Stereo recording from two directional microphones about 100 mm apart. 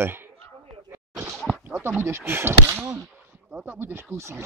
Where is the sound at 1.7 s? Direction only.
20° right (ahead or behind).